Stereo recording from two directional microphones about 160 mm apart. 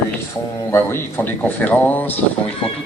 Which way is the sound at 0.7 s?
15° left (ahead or behind).